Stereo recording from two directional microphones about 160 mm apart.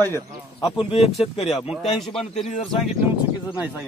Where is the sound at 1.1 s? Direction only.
Centre (ahead or behind).